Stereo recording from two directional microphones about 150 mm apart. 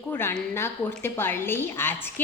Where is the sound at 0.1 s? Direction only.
15° left (ahead or behind).